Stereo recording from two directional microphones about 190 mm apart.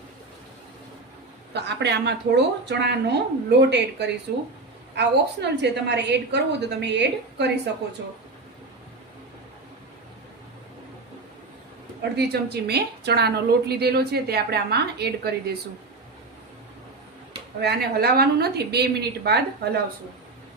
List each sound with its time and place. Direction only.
1.5 s a woman's voice: 60° right (ahead or behind)
12.1 s a woman's voice: 60° right (ahead or behind)
17.6 s a woman's voice: 55° right (ahead or behind)